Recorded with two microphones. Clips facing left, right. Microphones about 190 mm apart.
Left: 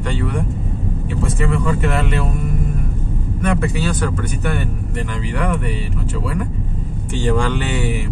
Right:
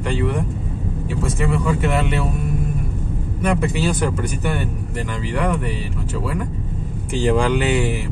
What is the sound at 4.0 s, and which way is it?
Speech, 10° right (ahead or behind).